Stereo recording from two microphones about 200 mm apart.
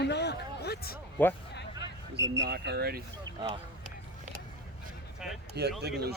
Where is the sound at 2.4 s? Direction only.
55° right (ahead or behind).